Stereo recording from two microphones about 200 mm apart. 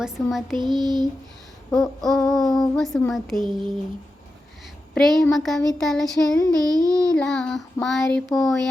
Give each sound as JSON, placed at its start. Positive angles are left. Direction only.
{"t": 0.0, "sound": "speech", "side_deg": 0}
{"t": 0.8, "sound": "speech", "side_deg": -20}
{"t": 1.7, "sound": "speech", "side_deg": 0}
{"t": 3.3, "sound": "speech", "side_deg": -25}
{"t": 4.9, "sound": "speech", "side_deg": 0}
{"t": 6.6, "sound": "a sound", "side_deg": -20}
{"t": 7.1, "sound": "speech", "side_deg": 5}